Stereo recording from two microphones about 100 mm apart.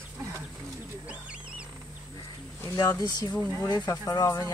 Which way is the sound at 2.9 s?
45° left (ahead or behind).